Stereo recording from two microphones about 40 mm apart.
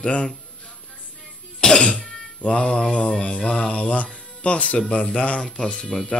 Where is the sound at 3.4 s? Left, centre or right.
Left.